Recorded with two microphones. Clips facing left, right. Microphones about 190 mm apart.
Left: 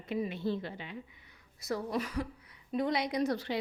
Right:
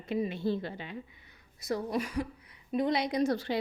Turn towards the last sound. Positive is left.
turn(degrees=-30)  # may be behind; listen again after turning